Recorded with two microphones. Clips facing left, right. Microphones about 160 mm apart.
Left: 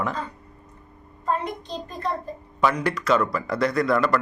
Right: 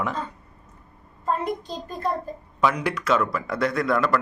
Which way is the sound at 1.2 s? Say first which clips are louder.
Right 1 dB; 5° right (ahead or behind).